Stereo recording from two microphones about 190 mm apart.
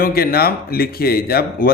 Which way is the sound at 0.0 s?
50° left (ahead or behind).